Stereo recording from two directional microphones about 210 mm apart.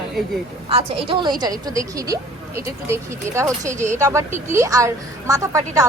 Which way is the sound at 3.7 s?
35° right (ahead or behind).